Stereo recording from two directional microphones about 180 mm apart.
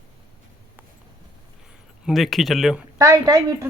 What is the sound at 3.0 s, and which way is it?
Speech, 20° right (ahead or behind).